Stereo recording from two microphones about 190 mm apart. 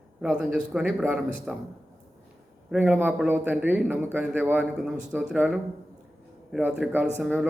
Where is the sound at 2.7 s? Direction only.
10° right (ahead or behind).